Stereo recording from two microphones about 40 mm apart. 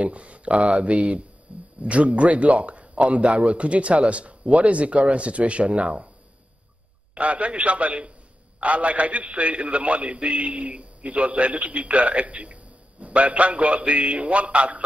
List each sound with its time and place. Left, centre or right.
0.0 s a man's voice: right
7.2 s a man's voice: right